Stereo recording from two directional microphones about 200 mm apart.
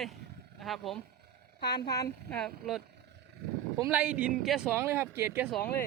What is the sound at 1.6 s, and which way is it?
Speech, 55° left (ahead or behind).